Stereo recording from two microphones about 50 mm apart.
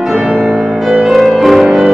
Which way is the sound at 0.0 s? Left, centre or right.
Centre.